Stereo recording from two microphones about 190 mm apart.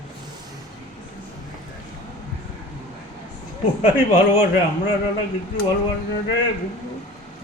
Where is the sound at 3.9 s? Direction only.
30° left (ahead or behind).